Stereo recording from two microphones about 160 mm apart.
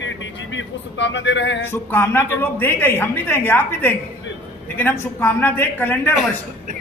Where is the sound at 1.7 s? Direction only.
10° left (ahead or behind).